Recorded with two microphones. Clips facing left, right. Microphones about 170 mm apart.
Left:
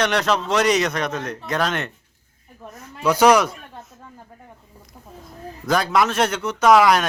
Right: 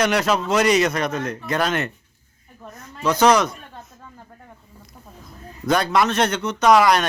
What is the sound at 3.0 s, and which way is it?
Speech, 10° left (ahead or behind).